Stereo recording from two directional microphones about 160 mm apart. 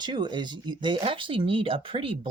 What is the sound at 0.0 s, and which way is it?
Speech, 30° right (ahead or behind).